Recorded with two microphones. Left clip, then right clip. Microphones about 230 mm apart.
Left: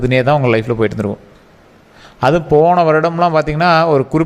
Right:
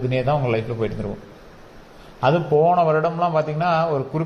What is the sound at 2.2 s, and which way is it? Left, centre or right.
A man's voice, left.